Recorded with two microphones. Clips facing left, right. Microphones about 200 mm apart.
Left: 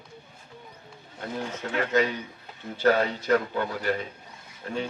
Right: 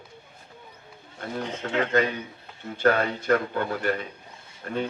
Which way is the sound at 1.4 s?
20° right (ahead or behind).